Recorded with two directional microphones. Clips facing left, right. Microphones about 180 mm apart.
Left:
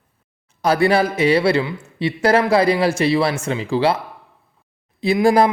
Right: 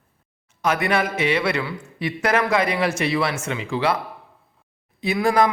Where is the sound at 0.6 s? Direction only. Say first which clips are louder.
Left 5 dB; 35° left (ahead or behind).